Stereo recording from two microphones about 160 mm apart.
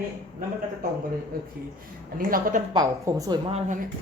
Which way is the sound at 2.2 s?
65° right (ahead or behind).